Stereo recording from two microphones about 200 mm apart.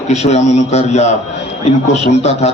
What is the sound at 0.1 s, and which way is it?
A man's voice, 35° left (ahead or behind).